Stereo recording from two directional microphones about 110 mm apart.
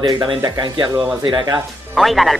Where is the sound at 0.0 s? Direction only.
40° right (ahead or behind).